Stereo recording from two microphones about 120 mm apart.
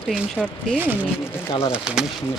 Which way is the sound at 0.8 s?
15° right (ahead or behind).